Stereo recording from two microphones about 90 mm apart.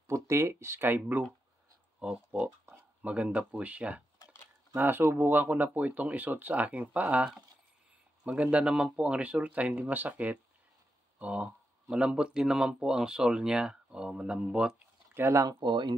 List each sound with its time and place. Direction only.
0.0 s speech: 35° right (ahead or behind)
2.0 s speech: 10° right (ahead or behind)
8.3 s speech: 15° right (ahead or behind)
15.1 s speech: 30° right (ahead or behind)
15.4 s speech: 55° right (ahead or behind)